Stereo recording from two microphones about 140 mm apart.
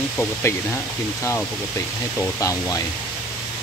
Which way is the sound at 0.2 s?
20° left (ahead or behind).